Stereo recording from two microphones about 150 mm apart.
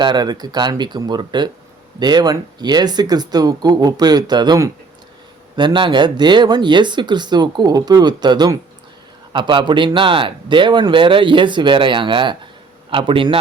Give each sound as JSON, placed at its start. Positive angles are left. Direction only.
{"t": 0.0, "sound": "a man's voice", "side_deg": -30}